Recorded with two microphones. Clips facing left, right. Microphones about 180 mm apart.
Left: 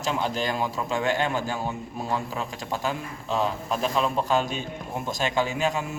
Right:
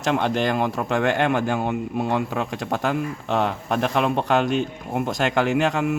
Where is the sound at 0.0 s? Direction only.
65° right (ahead or behind).